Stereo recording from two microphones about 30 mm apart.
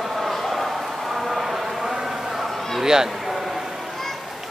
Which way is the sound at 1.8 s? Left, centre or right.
Centre.